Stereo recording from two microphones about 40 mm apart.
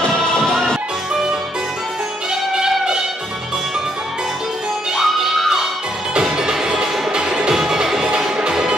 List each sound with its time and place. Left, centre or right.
0.0 s music: centre
2.5 s music: centre
4.9 s music: centre